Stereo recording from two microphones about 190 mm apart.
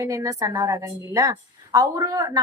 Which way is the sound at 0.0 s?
15° right (ahead or behind).